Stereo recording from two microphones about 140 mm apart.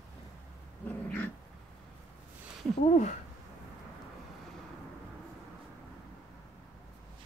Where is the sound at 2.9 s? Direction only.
60° left (ahead or behind).